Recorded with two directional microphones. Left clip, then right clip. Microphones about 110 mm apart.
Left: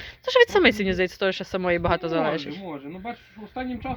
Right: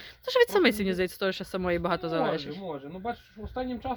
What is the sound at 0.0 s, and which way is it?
Speech, 30° right (ahead or behind).